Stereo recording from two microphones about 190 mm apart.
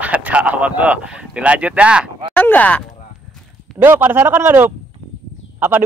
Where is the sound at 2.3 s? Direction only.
10° left (ahead or behind).